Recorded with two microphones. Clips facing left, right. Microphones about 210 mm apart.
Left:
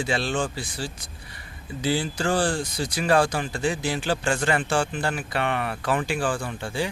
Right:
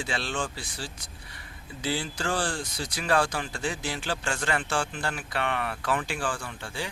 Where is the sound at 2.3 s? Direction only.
35° left (ahead or behind).